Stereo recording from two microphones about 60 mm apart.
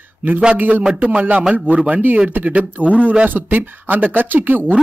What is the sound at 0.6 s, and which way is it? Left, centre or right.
Speech, right.